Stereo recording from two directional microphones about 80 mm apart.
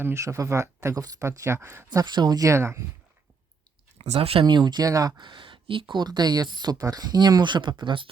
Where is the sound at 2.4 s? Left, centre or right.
Right.